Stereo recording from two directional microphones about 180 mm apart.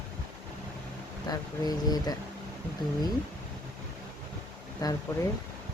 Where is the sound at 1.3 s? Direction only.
20° left (ahead or behind).